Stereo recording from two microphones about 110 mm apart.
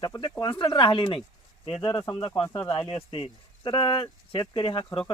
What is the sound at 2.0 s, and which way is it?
Speech, 25° left (ahead or behind).